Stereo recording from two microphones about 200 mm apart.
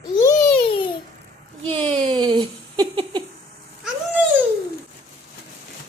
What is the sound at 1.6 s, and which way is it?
Giggle, 25° right (ahead or behind).